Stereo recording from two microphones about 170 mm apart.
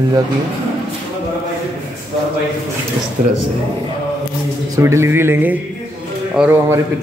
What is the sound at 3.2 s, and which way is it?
Speech, 45° right (ahead or behind).